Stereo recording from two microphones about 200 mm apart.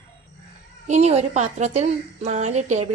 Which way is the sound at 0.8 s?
35° right (ahead or behind).